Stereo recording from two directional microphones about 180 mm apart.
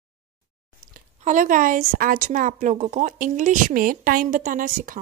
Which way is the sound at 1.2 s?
45° right (ahead or behind).